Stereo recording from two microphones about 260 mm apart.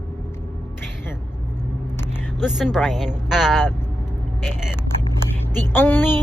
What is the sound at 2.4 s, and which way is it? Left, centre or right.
A woman's voice, centre.